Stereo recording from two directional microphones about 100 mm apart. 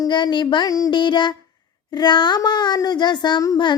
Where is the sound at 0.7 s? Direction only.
35° left (ahead or behind).